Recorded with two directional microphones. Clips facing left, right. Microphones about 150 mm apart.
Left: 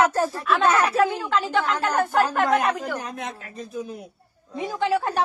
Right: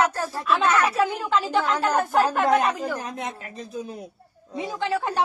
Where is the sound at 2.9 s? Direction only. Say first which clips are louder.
Even; 25° right (ahead or behind).